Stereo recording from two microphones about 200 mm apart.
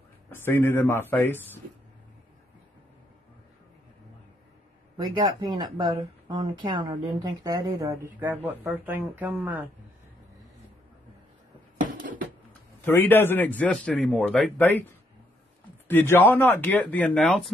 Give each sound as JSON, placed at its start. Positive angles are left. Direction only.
{"t": 0.5, "sound": "a man's voice", "side_deg": 10}
{"t": 4.9, "sound": "speech", "side_deg": -20}
{"t": 11.8, "sound": "a sound", "side_deg": -45}
{"t": 12.8, "sound": "a man's voice", "side_deg": 10}
{"t": 15.9, "sound": "a man's voice", "side_deg": 10}